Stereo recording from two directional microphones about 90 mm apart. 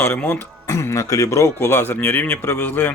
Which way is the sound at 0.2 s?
20° left (ahead or behind).